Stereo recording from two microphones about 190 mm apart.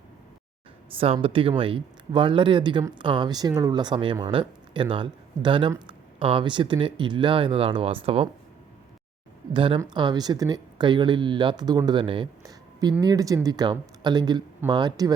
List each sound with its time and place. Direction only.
0.9 s speech: 30° right (ahead or behind)
9.5 s speech: 25° right (ahead or behind)